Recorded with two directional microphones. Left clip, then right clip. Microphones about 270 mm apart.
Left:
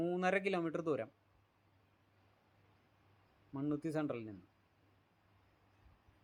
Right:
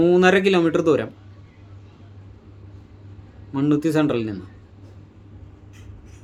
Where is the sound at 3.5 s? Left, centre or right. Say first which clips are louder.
Right 19 dB; left.